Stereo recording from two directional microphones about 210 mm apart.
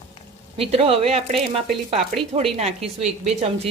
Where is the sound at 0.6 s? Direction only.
25° right (ahead or behind).